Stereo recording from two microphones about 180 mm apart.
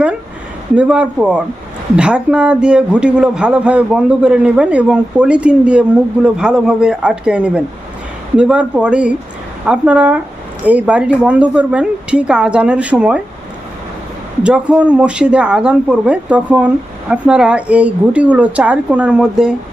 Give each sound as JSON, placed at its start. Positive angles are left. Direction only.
{"t": 0.8, "sound": "a man's voice", "side_deg": -5}
{"t": 14.4, "sound": "speech", "side_deg": -5}